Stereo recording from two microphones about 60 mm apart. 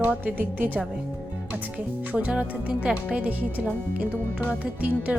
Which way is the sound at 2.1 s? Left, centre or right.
Right.